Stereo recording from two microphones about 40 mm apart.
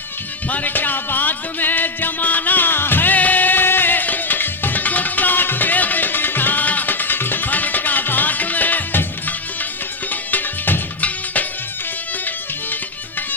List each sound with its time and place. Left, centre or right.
0.4 s music: left
3.2 s music: left